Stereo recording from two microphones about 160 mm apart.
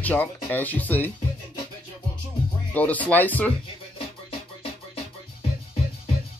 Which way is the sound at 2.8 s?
10° left (ahead or behind).